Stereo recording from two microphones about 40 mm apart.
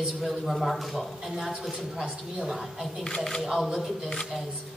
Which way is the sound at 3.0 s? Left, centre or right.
Centre.